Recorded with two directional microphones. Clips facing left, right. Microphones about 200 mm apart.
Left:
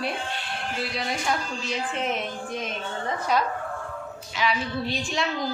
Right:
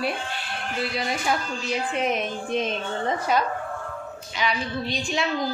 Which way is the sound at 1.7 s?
15° right (ahead or behind).